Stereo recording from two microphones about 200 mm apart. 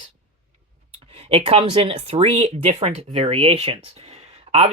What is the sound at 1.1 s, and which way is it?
Speech, 30° right (ahead or behind).